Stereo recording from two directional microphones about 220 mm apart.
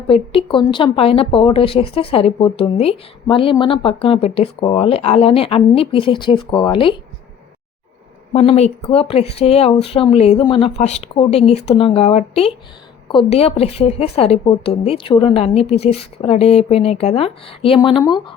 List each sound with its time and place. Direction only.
0.1 s speech: 25° left (ahead or behind)
8.3 s speech: 25° left (ahead or behind)